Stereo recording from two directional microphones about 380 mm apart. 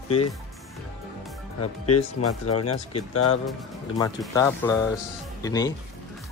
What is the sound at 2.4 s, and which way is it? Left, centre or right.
Speech, left.